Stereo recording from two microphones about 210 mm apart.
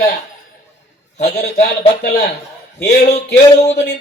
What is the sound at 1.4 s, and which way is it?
Speech, 50° left (ahead or behind).